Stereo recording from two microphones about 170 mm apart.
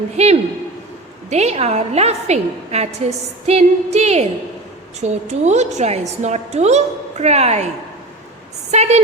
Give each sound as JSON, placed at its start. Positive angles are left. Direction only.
{"t": 0.2, "sound": "a woman's voice", "side_deg": -40}
{"t": 8.7, "sound": "a woman's voice", "side_deg": -40}